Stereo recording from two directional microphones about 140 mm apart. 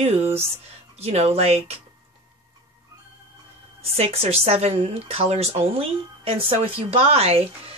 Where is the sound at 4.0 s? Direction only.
45° right (ahead or behind).